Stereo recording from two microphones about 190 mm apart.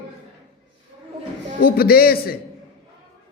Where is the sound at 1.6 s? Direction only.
50° left (ahead or behind).